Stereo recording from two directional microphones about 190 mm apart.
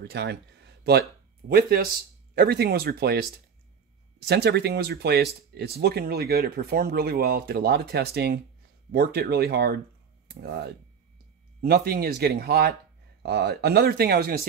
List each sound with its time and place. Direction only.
0.1 s speech: 60° right (ahead or behind)
4.3 s speech: 60° right (ahead or behind)